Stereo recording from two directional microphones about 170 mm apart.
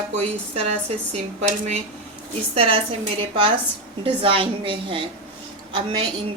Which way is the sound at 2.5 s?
35° right (ahead or behind).